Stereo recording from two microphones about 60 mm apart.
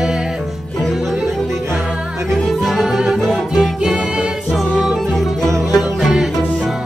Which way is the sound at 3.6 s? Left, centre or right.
Centre.